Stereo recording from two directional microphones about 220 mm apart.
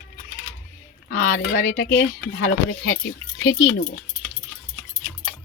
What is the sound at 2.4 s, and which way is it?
Speech, 65° left (ahead or behind).